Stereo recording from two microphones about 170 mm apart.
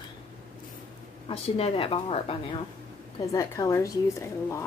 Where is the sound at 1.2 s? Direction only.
35° left (ahead or behind).